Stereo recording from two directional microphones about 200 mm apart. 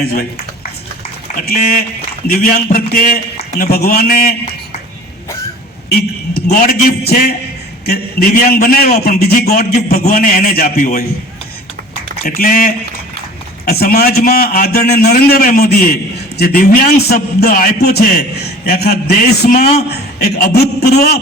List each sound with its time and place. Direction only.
0.0 s a man's voice: 50° left (ahead or behind)
1.5 s a man's voice: 50° left (ahead or behind)
5.9 s a man's voice: 50° left (ahead or behind)
12.2 s a man's voice: 45° left (ahead or behind)
19.5 s speech: 35° left (ahead or behind)
19.9 s a man's voice: 50° left (ahead or behind)